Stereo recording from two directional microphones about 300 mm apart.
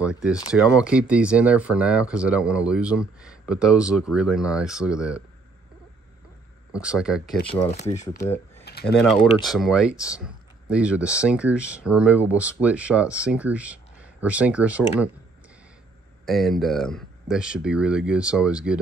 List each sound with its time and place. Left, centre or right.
0.0 s speech: centre
3.2 s a sound: centre
3.9 s speech: centre
6.7 s speech: centre
7.7 s speech: left
8.7 s typing: left
9.0 s speech: centre
16.3 s speech: centre